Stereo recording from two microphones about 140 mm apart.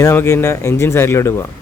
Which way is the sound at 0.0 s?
20° left (ahead or behind).